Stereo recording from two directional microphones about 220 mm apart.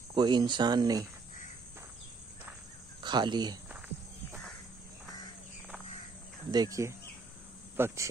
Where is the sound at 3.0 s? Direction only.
20° right (ahead or behind).